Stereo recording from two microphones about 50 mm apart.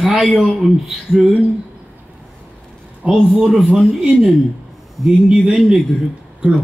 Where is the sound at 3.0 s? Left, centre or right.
Right.